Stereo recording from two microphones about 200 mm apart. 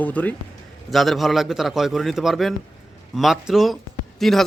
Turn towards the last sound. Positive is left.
turn(degrees=0)  # may be behind; listen again after turning